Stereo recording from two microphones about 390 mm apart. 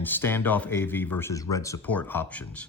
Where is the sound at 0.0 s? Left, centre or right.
Centre.